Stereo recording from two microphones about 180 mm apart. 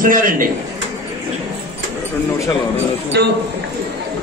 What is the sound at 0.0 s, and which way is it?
Speech, 50° right (ahead or behind).